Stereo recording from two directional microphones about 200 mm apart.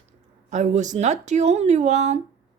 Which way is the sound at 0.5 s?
35° right (ahead or behind).